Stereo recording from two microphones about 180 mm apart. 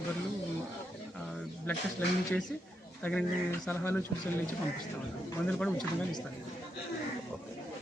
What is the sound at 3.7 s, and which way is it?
Speech, 10° left (ahead or behind).